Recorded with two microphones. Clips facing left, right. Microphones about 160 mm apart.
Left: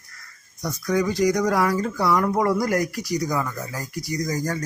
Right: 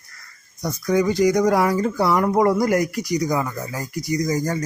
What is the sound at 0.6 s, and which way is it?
Speech, 25° right (ahead or behind).